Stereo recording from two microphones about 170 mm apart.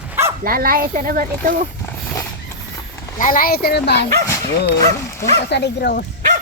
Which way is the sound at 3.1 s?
55° left (ahead or behind).